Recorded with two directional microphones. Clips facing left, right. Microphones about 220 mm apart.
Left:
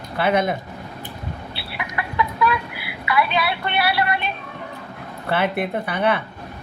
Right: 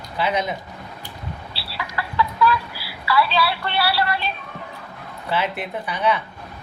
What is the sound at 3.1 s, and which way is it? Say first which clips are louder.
A woman's voice: right 1 dB; 20° left (ahead or behind).